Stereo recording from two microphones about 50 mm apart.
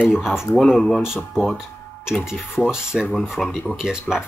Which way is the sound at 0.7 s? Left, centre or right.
Centre.